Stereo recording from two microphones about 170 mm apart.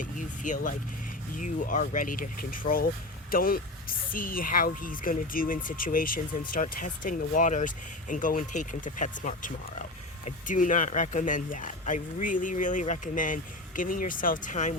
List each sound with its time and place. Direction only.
0.0 s speech: 50° left (ahead or behind)